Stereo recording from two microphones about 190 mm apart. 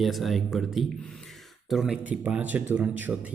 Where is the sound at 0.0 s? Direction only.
Centre (ahead or behind).